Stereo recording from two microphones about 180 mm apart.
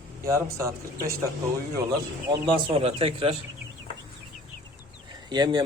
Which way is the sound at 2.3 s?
25° right (ahead or behind).